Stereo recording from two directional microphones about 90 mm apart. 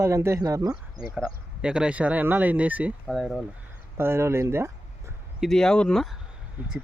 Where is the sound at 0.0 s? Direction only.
30° right (ahead or behind).